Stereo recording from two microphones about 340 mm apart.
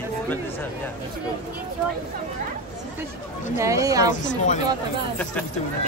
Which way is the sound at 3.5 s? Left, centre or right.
Centre.